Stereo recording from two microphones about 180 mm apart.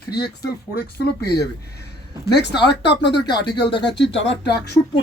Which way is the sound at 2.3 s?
70° left (ahead or behind).